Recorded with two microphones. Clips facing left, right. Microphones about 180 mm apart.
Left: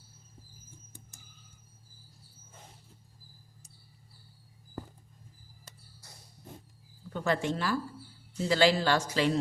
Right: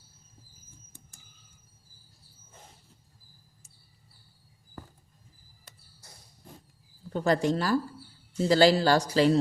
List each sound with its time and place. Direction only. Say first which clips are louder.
7.1 s speech: right 5 dB; 35° right (ahead or behind)